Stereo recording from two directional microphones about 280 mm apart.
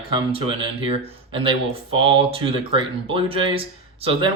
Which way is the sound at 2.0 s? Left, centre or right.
Centre.